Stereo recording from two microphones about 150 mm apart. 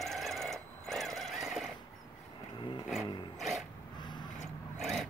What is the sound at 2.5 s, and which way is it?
Vehicle, 30° left (ahead or behind).